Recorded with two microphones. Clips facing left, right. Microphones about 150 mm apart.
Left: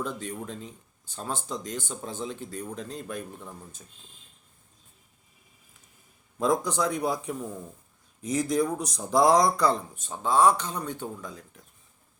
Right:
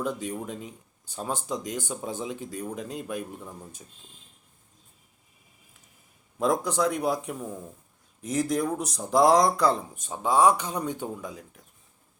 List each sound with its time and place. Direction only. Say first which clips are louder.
0.0 s speech: right 3 dB; 10° right (ahead or behind)
6.4 s speech: right 1 dB; 5° right (ahead or behind)
9.9 s speech: right 1 dB; 10° right (ahead or behind)